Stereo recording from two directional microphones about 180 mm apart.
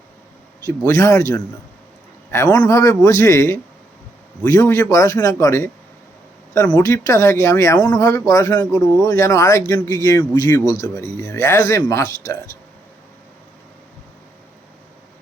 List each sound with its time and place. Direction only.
0.9 s speech: 15° left (ahead or behind)